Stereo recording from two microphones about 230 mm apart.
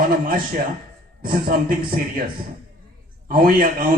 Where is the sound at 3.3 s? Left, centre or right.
Right.